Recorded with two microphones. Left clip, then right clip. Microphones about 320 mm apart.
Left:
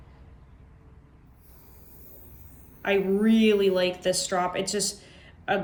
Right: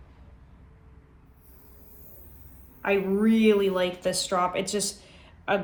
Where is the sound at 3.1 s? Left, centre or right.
Centre.